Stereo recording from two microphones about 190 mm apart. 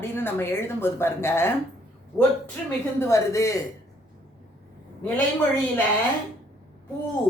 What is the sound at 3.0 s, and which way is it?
Speech, 15° left (ahead or behind).